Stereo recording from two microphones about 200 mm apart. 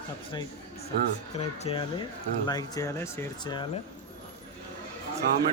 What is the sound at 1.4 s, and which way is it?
Speech, 30° left (ahead or behind).